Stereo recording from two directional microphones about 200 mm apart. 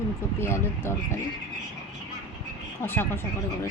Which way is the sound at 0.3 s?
10° left (ahead or behind).